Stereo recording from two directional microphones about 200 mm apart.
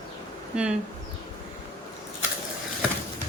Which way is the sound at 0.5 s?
5° right (ahead or behind).